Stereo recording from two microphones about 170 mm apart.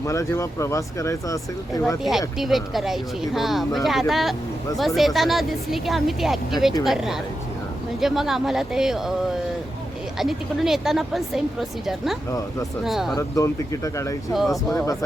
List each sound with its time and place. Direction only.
0.0 s speech: 15° left (ahead or behind)
2.0 s speech: centre (ahead or behind)
10.2 s speech: centre (ahead or behind)
12.8 s speech: centre (ahead or behind)
13.1 s speech: 20° left (ahead or behind)
14.3 s speech: centre (ahead or behind)
14.7 s speech: 20° left (ahead or behind)